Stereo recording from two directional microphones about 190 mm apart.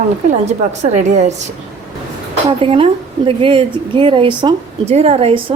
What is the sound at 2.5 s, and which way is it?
A woman's voice, 30° right (ahead or behind).